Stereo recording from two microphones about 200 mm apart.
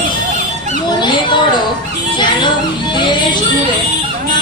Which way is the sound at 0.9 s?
20° left (ahead or behind).